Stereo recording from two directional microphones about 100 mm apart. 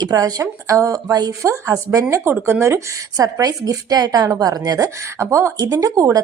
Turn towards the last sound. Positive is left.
turn(degrees=-35)  # may be behind; listen again after turning